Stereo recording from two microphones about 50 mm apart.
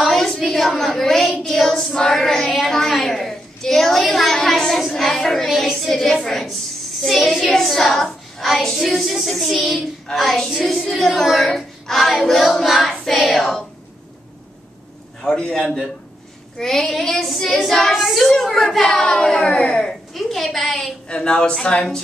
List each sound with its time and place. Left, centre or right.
0.0 s a sound: centre
1.4 s child singing: centre
2.7 s a woman's voice: centre
5.5 s child singing: centre
15.2 s speech: left
15.6 s child singing: centre
16.5 s child singing: centre
18.9 s speech: centre
20.2 s child singing: centre
21.1 s speech: centre